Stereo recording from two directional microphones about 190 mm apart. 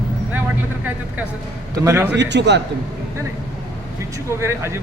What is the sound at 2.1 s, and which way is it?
Speech, 65° right (ahead or behind).